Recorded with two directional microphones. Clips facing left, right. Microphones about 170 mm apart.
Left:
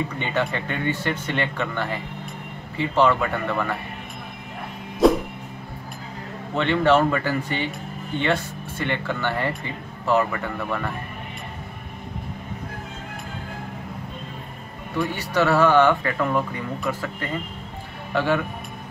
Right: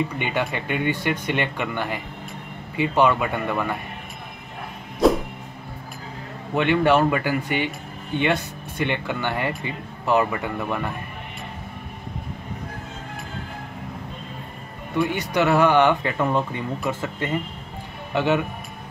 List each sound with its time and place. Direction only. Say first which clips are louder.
0.2 s speech: even; 15° right (ahead or behind)
5.0 s music: left 1 dB; centre (ahead or behind)
6.5 s speech: even; 15° right (ahead or behind)
15.1 s speech: left 1 dB; 15° right (ahead or behind)